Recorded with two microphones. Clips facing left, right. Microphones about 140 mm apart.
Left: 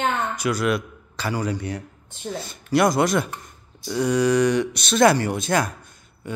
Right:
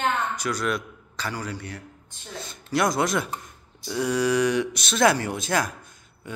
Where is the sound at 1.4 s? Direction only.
20° left (ahead or behind).